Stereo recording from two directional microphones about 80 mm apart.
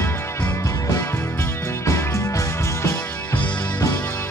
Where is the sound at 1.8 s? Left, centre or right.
Left.